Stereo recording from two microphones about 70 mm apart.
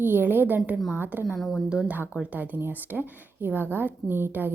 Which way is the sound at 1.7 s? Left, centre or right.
Centre.